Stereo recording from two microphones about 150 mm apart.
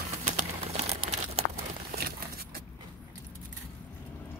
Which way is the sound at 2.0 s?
90° right.